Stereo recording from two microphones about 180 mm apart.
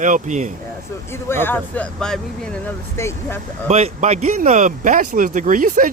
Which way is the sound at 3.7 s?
35° right (ahead or behind).